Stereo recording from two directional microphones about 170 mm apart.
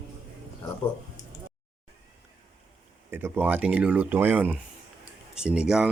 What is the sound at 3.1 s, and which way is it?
Speech, 10° right (ahead or behind).